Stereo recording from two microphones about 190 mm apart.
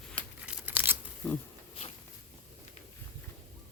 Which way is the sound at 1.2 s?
5° left (ahead or behind).